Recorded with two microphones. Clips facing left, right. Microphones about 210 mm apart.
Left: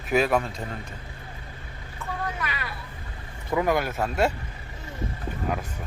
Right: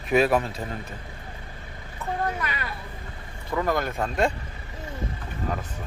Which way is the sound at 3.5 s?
15° left (ahead or behind).